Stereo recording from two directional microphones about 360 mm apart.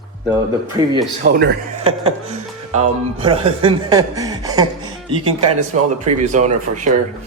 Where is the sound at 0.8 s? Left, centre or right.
Centre.